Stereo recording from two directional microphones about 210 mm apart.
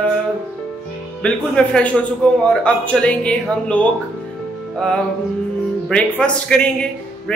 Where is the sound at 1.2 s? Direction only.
5° left (ahead or behind).